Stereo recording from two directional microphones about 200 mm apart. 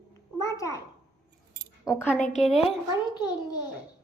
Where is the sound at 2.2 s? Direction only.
35° left (ahead or behind).